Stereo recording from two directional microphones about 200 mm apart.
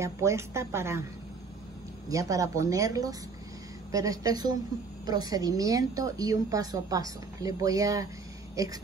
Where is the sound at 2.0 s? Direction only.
15° right (ahead or behind).